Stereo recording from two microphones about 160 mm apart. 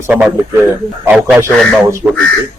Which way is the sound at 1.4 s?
15° right (ahead or behind).